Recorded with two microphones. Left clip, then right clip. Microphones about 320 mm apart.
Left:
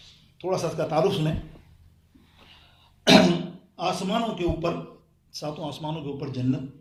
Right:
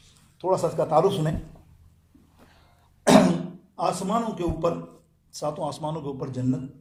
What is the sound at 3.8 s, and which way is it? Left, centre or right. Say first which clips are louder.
A man's voice: right 1 dB; right.